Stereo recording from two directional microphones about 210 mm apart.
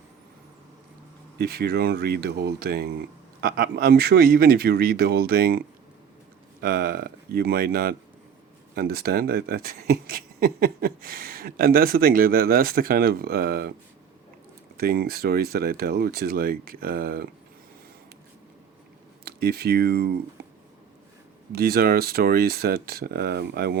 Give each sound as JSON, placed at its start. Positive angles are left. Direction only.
{"t": 1.4, "sound": "speech", "side_deg": -50}
{"t": 14.8, "sound": "speech", "side_deg": -45}
{"t": 19.2, "sound": "speech", "side_deg": -50}
{"t": 21.5, "sound": "speech", "side_deg": -45}